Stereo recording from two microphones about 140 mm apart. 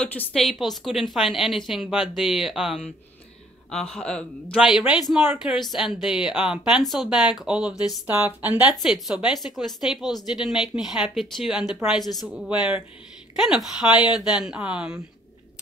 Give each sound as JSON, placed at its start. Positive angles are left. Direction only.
{"t": 0.3, "sound": "speech", "side_deg": 0}